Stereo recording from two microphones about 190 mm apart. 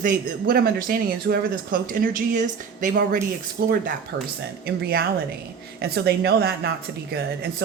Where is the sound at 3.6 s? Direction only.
55° right (ahead or behind).